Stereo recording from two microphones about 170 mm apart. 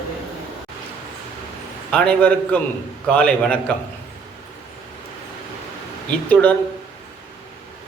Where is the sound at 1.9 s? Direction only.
5° left (ahead or behind).